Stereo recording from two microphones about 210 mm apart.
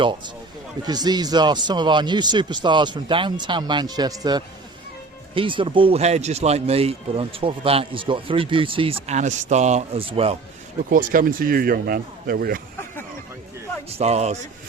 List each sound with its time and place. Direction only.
0.9 s speech: 20° right (ahead or behind)
10.9 s speech: 40° right (ahead or behind)
14.0 s speech: 30° right (ahead or behind)